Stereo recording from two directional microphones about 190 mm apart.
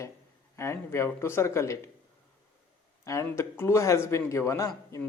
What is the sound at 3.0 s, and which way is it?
Speech, 15° left (ahead or behind).